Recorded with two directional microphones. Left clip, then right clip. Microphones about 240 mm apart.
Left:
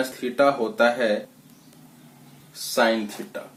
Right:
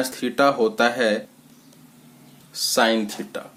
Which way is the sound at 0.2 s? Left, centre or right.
Right.